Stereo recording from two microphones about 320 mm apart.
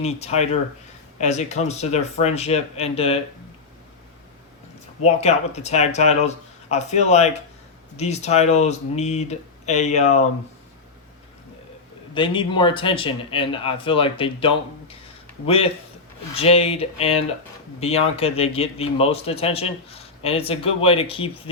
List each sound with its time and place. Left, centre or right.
0.0 s a man's voice: centre
5.0 s a man's voice: centre
12.1 s a man's voice: centre